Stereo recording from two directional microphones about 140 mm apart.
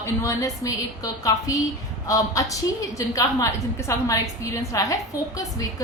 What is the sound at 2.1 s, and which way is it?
A woman's voice, 25° left (ahead or behind).